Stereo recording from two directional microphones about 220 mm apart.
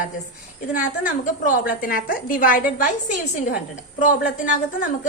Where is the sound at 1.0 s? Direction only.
40° left (ahead or behind).